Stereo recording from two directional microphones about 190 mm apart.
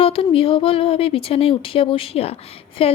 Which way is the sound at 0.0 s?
30° left (ahead or behind).